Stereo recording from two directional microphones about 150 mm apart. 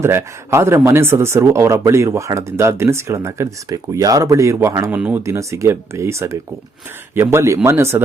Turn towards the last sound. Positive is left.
turn(degrees=-15)  # may be behind; listen again after turning